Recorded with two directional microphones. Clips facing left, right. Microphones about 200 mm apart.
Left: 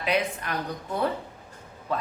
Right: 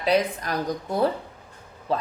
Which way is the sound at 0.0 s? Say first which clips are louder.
Right 4 dB; 35° right (ahead or behind).